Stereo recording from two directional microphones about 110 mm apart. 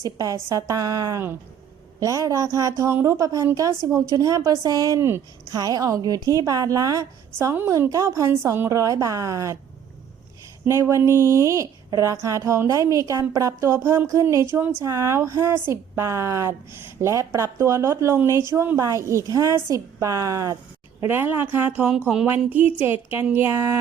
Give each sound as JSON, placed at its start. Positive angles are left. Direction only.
{"t": 0.0, "sound": "a woman's voice", "side_deg": -30}
{"t": 10.7, "sound": "a woman's voice", "side_deg": -25}
{"t": 21.0, "sound": "speech", "side_deg": -15}